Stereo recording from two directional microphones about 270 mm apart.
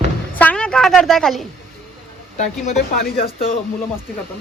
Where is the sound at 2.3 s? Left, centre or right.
Left.